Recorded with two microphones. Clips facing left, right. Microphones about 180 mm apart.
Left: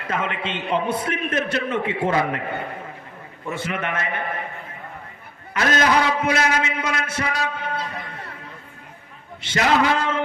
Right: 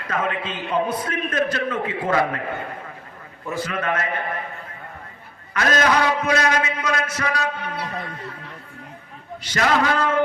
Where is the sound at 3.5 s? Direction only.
25° left (ahead or behind).